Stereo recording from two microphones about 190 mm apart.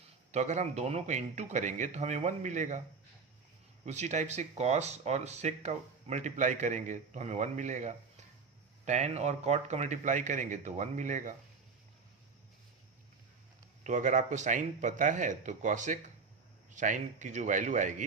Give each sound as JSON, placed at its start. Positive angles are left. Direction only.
{"t": 0.3, "sound": "speech", "side_deg": -40}
{"t": 3.8, "sound": "speech", "side_deg": -35}
{"t": 13.8, "sound": "speech", "side_deg": -40}